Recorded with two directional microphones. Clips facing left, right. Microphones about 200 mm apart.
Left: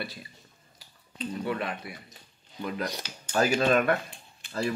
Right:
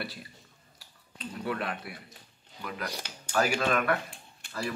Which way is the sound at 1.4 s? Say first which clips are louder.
Even; centre (ahead or behind).